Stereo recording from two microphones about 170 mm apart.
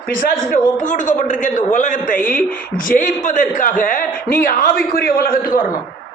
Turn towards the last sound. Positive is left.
turn(degrees=60)  # may be behind; listen again after turning